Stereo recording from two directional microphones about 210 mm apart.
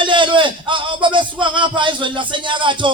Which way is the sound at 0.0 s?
25° right (ahead or behind).